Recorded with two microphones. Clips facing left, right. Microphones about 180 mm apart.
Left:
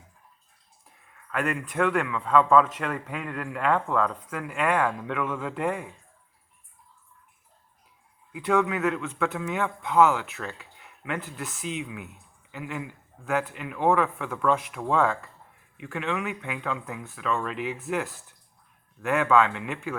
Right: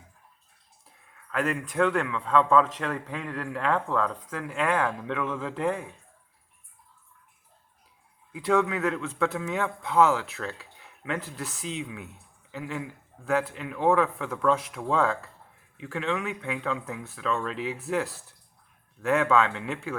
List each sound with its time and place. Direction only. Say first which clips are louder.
0.9 s speech: left 2 dB; 35° right (ahead or behind)
8.3 s speech: even; 35° right (ahead or behind)